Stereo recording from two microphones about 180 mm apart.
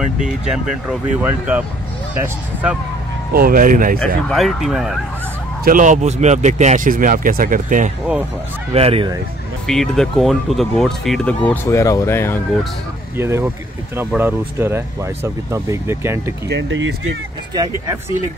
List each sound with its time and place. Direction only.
0.5 s speech: 5° right (ahead or behind)
3.3 s speech: 55° right (ahead or behind)
4.3 s speech: centre (ahead or behind)
5.6 s speech: 50° right (ahead or behind)
8.7 s speech: 35° right (ahead or behind)
9.7 s speech: 5° left (ahead or behind)
13.2 s speech: 15° right (ahead or behind)
16.4 s speech: 85° right